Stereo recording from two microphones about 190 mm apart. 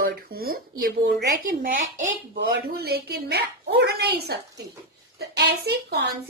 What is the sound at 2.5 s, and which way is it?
A woman's voice, 60° right (ahead or behind).